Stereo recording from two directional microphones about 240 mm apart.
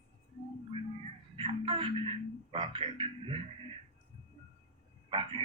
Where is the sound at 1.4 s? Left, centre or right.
Right.